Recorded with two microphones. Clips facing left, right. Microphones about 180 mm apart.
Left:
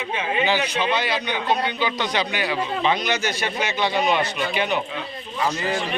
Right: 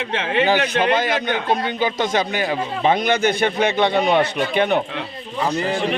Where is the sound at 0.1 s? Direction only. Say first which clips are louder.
Right 4 dB; 90° right.